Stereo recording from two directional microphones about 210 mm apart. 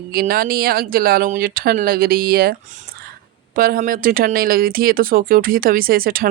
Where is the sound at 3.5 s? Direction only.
45° right (ahead or behind).